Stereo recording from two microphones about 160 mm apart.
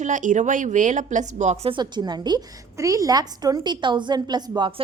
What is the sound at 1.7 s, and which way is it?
A woman's voice, 25° right (ahead or behind).